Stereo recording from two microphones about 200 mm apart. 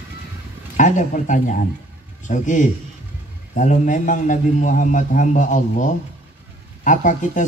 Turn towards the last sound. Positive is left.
turn(degrees=40)  # may be behind; listen again after turning